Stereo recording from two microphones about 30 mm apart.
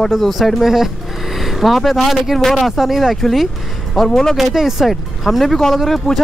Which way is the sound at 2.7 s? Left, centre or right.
Centre.